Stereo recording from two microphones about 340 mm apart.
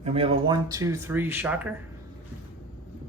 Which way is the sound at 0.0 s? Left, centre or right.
Centre.